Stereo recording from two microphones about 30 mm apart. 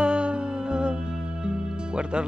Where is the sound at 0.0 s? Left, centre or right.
Right.